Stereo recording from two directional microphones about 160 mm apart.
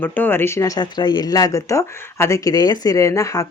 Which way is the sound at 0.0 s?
10° left (ahead or behind).